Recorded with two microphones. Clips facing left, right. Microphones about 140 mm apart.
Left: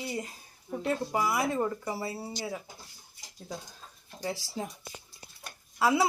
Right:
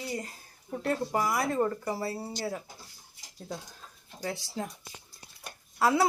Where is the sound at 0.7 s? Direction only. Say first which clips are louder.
Right 1 dB; 5° left (ahead or behind).